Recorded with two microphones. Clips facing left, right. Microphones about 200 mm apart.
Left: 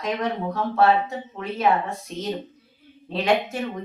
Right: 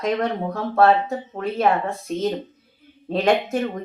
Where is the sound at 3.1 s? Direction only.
45° right (ahead or behind).